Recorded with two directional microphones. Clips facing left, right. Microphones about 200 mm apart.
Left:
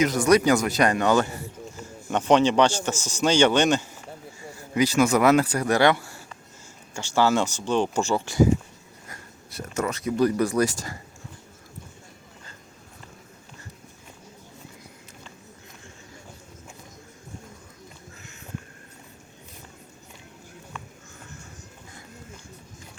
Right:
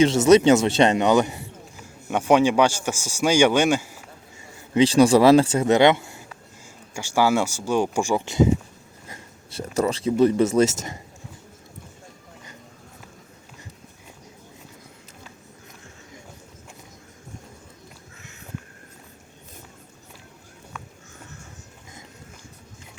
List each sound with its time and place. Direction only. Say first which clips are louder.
0.0 s speech: right 5 dB; 25° right (ahead or behind); by 3.8 s 10° right (ahead or behind)
4.7 s speech: right 5 dB; 30° right (ahead or behind)